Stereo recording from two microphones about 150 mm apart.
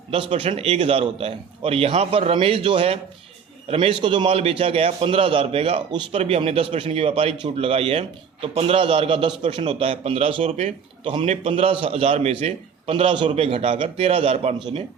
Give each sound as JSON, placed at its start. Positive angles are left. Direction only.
{"t": 0.1, "sound": "a man's voice", "side_deg": -40}